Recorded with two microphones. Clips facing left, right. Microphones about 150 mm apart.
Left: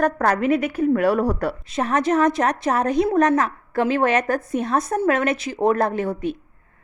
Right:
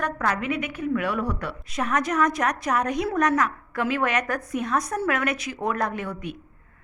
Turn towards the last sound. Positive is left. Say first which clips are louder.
# left 7 dB
turn(degrees=30)  # may be behind; listen again after turning